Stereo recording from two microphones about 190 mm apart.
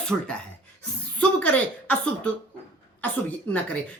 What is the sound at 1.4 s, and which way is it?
Speech, 10° left (ahead or behind).